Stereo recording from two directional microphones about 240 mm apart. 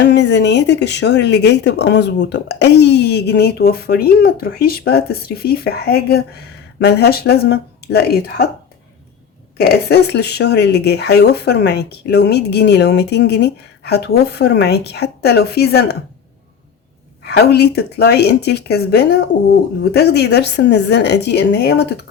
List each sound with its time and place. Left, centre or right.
0.0 s speech: left
9.6 s speech: left
17.2 s speech: left